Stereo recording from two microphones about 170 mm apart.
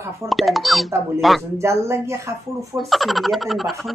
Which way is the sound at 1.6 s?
15° right (ahead or behind).